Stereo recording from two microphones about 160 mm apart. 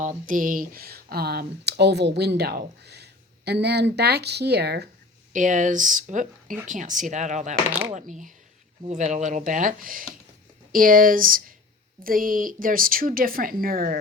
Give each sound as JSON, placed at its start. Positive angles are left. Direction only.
{"t": 0.0, "sound": "speech", "side_deg": -55}
{"t": 5.3, "sound": "speech", "side_deg": -50}